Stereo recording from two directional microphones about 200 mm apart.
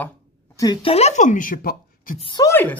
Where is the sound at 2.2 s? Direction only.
20° left (ahead or behind).